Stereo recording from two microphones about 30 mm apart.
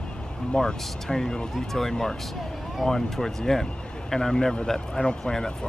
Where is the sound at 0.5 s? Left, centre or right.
Left.